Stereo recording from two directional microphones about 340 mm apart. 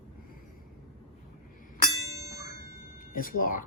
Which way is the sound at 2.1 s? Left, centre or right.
Right.